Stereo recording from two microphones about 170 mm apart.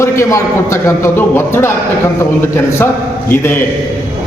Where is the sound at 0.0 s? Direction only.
15° left (ahead or behind).